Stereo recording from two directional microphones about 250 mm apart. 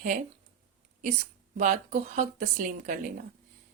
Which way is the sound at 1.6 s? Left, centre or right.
Right.